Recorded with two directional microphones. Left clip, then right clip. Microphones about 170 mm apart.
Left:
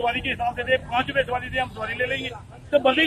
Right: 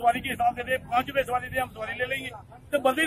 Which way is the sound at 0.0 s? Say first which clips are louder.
Right 1 dB; 10° right (ahead or behind).